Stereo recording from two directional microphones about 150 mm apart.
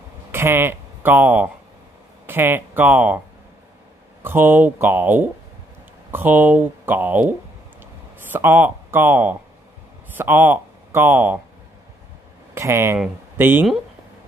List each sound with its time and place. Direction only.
0.3 s speech: 15° right (ahead or behind)
4.2 s speech: 15° right (ahead or behind)
12.5 s speech: 20° right (ahead or behind)